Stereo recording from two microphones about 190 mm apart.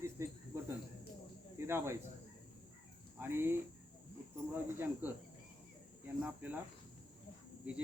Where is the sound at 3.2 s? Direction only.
10° right (ahead or behind).